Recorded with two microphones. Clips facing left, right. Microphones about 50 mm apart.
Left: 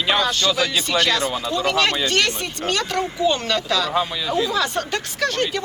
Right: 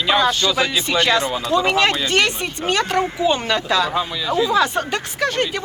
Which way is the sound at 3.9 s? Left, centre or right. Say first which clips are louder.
Right 1 dB; centre.